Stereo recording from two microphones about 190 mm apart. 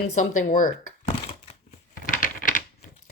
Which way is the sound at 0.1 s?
40° left (ahead or behind).